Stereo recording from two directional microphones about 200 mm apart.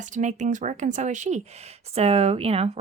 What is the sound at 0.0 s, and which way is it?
Speech, 35° right (ahead or behind).